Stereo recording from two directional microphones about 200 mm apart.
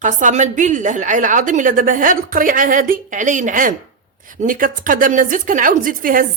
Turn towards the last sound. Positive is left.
turn(degrees=-45)  # may be behind; listen again after turning